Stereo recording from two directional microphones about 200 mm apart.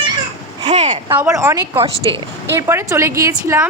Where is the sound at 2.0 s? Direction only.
25° right (ahead or behind).